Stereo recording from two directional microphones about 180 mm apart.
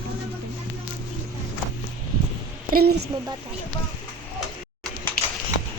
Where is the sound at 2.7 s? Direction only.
60° right (ahead or behind).